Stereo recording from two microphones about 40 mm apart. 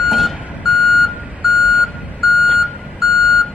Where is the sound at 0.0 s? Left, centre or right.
Centre.